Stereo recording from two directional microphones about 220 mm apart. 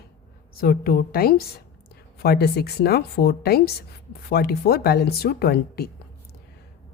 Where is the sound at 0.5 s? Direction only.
40° left (ahead or behind).